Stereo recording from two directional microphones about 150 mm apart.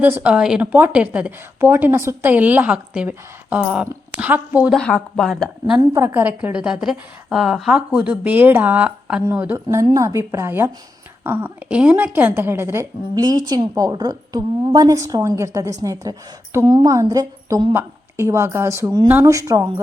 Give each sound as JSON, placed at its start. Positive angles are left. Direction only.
{"t": 0.0, "sound": "speech", "side_deg": -10}
{"t": 4.7, "sound": "speech", "side_deg": 5}
{"t": 5.9, "sound": "a woman's voice", "side_deg": -20}